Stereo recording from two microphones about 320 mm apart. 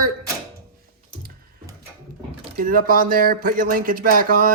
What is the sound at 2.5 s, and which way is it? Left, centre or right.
Speech, right.